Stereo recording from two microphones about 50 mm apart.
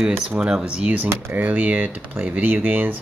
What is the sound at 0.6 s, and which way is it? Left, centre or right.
Speech, right.